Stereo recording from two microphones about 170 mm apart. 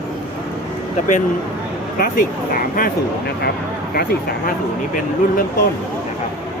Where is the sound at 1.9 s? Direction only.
55° left (ahead or behind).